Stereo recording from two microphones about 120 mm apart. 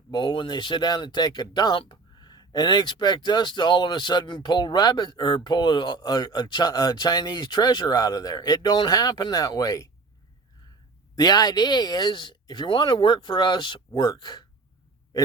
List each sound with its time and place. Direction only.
0.1 s speech: 40° left (ahead or behind)
11.1 s speech: 35° left (ahead or behind)